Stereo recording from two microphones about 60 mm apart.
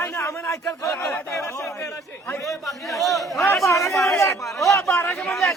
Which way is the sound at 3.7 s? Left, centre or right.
Left.